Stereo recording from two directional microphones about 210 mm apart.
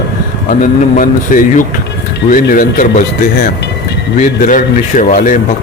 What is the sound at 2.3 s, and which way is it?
Speech, 40° left (ahead or behind).